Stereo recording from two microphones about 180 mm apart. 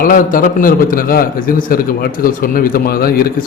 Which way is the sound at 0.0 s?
50° left (ahead or behind).